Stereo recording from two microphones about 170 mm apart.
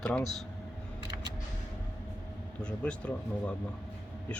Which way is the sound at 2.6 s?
5° left (ahead or behind).